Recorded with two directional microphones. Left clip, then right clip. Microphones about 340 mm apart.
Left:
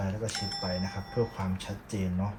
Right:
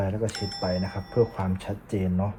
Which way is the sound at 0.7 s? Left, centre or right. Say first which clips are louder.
Right 6 dB; right.